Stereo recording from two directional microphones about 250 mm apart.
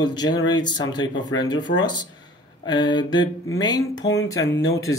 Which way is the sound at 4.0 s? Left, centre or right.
Left.